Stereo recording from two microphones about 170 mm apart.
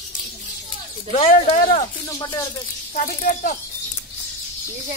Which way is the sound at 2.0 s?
20° left (ahead or behind).